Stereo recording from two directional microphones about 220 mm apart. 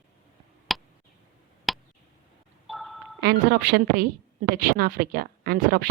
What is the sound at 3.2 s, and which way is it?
Speech, 40° right (ahead or behind).